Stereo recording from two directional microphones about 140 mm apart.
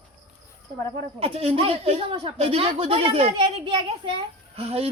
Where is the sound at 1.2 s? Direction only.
45° right (ahead or behind).